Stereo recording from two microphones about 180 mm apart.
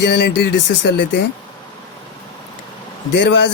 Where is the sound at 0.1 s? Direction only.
70° left (ahead or behind).